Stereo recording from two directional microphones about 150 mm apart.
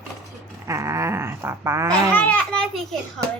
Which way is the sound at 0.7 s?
20° right (ahead or behind).